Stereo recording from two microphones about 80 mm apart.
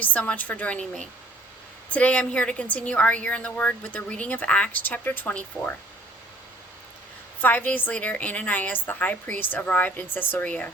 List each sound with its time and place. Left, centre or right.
0.0 s a woman's voice: centre
7.4 s a woman's voice: left